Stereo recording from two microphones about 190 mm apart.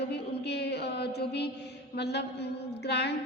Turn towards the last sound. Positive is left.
turn(degrees=60)  # may be behind; listen again after turning